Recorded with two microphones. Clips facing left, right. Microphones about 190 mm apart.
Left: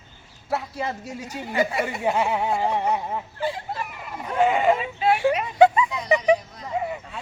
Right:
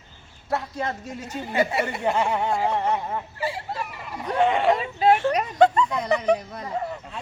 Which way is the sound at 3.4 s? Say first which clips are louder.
Left 3 dB; 5° right (ahead or behind).